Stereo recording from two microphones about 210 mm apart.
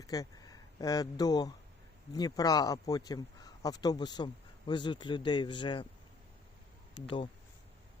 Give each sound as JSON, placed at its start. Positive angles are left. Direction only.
{"t": 0.0, "sound": "speech", "side_deg": 15}
{"t": 6.9, "sound": "speech", "side_deg": 25}